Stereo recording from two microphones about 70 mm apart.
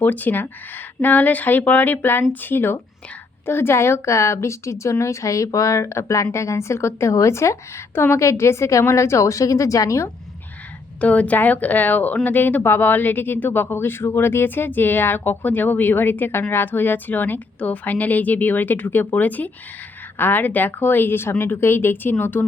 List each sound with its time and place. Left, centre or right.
0.0 s a woman's voice: left
11.0 s a woman's voice: left